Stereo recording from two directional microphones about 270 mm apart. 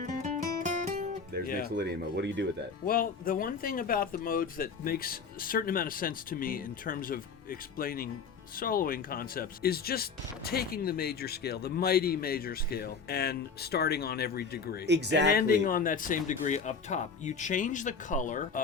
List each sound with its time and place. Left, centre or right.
0.0 s music: right
1.6 s speech: right
2.8 s speech: left
14.8 s speech: right
15.3 s speech: left